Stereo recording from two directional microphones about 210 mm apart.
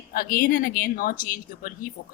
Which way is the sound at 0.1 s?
45° left (ahead or behind).